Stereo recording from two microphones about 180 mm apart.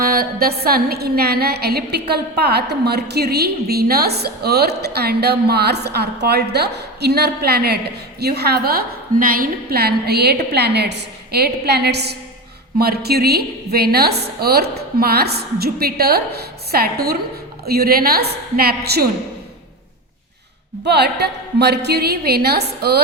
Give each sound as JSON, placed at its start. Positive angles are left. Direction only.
{"t": 0.0, "sound": "music", "side_deg": -55}
{"t": 0.6, "sound": "a woman's voice", "side_deg": -60}
{"t": 20.8, "sound": "a woman's voice", "side_deg": -65}